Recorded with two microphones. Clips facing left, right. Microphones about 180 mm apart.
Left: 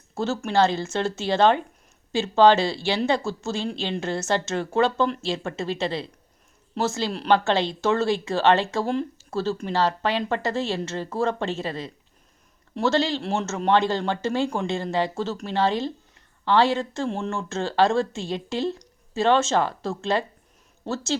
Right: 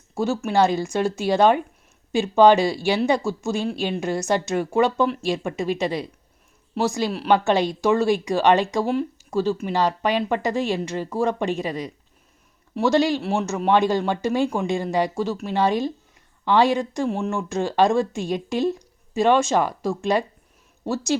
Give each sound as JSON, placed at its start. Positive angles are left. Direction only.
{"t": 0.1, "sound": "speech", "side_deg": -15}